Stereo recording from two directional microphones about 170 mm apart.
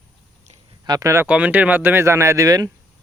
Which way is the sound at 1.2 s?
5° right (ahead or behind).